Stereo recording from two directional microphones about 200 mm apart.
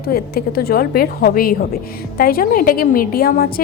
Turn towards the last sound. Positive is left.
turn(degrees=45)  # may be behind; listen again after turning